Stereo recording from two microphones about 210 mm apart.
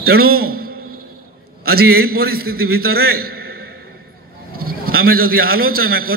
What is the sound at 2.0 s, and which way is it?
A man's voice, 45° right (ahead or behind).